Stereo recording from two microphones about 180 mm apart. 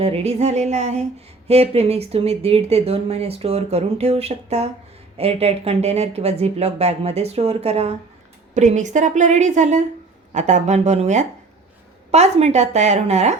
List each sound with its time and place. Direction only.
0.0 s speech: 35° right (ahead or behind)